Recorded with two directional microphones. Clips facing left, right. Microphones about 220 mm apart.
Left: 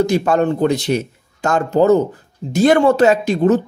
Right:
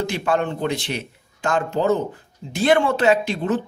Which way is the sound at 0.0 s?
40° left (ahead or behind).